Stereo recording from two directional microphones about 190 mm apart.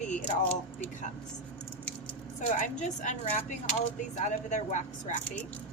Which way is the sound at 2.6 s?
40° left (ahead or behind).